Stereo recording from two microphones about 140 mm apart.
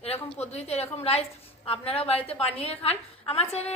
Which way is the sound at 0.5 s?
45° left (ahead or behind).